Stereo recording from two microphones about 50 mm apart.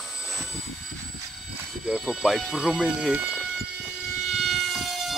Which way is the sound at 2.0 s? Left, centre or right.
Centre.